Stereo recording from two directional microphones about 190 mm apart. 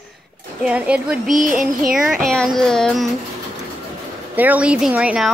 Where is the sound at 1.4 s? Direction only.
45° right (ahead or behind).